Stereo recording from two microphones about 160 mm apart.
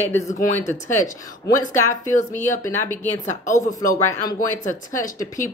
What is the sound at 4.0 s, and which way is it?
Speech, 15° left (ahead or behind).